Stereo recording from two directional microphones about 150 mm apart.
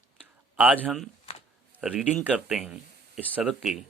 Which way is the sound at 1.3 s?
40° left (ahead or behind).